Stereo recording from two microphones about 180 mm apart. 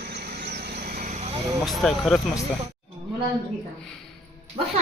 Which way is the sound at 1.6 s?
Centre (ahead or behind).